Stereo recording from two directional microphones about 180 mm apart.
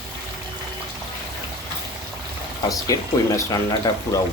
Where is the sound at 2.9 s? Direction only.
20° left (ahead or behind).